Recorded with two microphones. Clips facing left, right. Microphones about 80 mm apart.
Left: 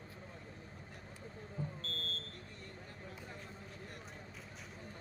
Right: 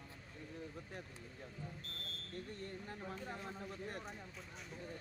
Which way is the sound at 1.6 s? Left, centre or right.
Left.